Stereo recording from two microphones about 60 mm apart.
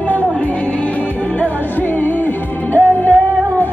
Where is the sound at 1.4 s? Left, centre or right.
Left.